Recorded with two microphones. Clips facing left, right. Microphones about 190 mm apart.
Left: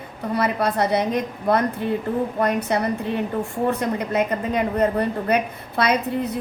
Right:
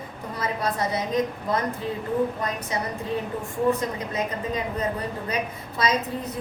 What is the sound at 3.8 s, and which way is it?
A woman's voice, 65° left (ahead or behind).